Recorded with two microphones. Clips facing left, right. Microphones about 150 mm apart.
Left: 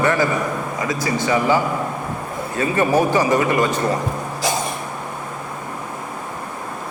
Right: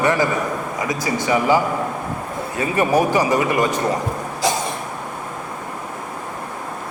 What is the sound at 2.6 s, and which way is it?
A man's voice, 15° right (ahead or behind).